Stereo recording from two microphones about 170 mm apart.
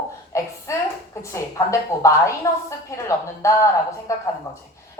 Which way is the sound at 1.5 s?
20° left (ahead or behind).